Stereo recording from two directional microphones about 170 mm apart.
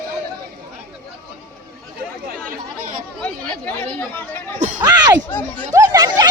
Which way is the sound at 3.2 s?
10° left (ahead or behind).